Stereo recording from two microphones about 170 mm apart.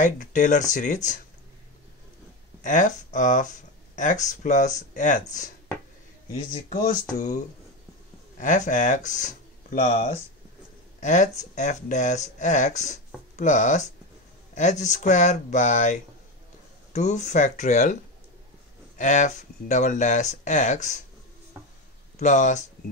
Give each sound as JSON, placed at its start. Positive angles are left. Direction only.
{"t": 0.0, "sound": "speech", "side_deg": 50}
{"t": 2.6, "sound": "speech", "side_deg": 50}
{"t": 6.5, "sound": "speech", "side_deg": 50}
{"t": 18.9, "sound": "speech", "side_deg": 45}
{"t": 22.2, "sound": "speech", "side_deg": 45}